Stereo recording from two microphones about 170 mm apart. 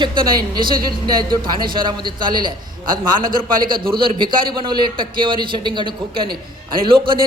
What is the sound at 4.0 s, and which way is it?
A man's voice, 30° right (ahead or behind).